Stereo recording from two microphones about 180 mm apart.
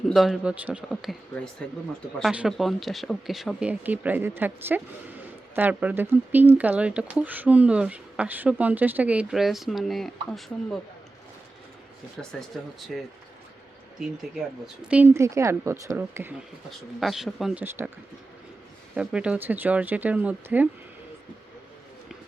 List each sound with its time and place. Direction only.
0.1 s speech: centre (ahead or behind)
2.1 s speech: 5° right (ahead or behind)
12.5 s speech: centre (ahead or behind)
14.8 s speech: 5° right (ahead or behind)
17.0 s speech: centre (ahead or behind)
18.9 s speech: 5° right (ahead or behind)